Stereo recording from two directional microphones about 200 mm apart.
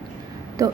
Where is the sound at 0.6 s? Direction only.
15° right (ahead or behind).